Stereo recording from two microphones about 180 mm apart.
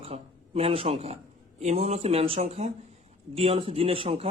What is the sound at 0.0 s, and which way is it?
A man's voice, 35° right (ahead or behind).